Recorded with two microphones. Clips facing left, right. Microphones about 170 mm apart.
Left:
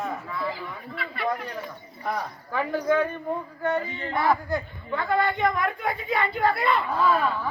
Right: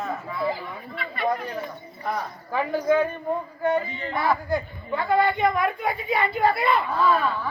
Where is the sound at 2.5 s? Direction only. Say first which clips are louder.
Right 2 dB; 5° right (ahead or behind).